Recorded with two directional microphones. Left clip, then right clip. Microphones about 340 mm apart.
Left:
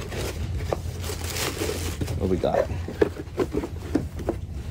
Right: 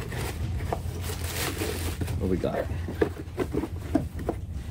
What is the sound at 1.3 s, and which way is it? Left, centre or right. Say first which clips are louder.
Zipper: left 3 dB; centre.